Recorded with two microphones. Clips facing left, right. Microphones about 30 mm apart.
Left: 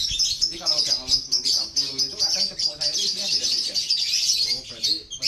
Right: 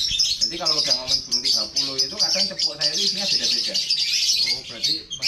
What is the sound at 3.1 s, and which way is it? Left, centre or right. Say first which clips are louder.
Speech: right 2 dB; right.